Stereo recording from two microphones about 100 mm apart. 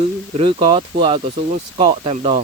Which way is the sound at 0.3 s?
65° right (ahead or behind).